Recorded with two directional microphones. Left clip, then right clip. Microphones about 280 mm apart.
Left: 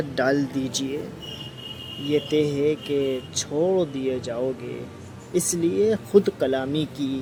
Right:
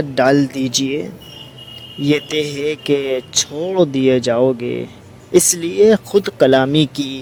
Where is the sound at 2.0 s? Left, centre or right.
Right.